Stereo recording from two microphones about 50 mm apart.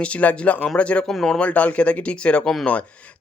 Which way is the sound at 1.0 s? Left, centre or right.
Centre.